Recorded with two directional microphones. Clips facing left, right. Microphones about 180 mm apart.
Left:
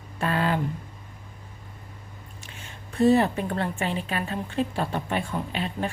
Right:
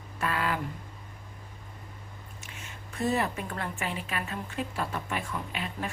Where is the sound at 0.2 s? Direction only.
30° left (ahead or behind).